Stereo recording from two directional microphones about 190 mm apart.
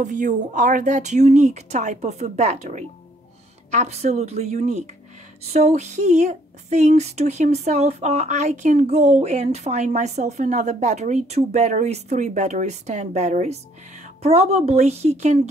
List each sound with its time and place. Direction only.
0.0 s a woman's voice: 40° right (ahead or behind)